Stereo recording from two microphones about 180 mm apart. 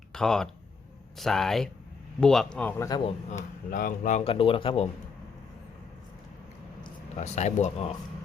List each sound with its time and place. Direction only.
0.1 s speech: 5° left (ahead or behind)
3.3 s speech: 55° left (ahead or behind)
4.2 s speech: 30° left (ahead or behind)
7.2 s speech: 40° left (ahead or behind)